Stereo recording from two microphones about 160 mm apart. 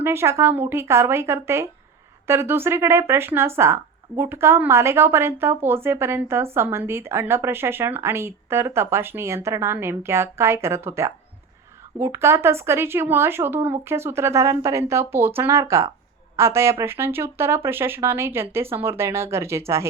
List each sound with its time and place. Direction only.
0.0 s a woman's voice: 15° right (ahead or behind)